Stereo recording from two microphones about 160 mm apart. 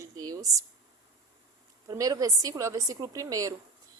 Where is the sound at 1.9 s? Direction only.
20° right (ahead or behind).